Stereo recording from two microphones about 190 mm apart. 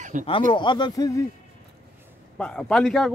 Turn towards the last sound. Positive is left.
turn(degrees=0)  # may be behind; listen again after turning